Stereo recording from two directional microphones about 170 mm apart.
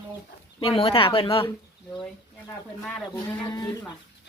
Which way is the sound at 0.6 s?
35° left (ahead or behind).